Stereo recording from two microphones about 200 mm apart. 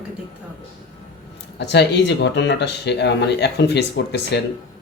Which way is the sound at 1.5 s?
60° left (ahead or behind).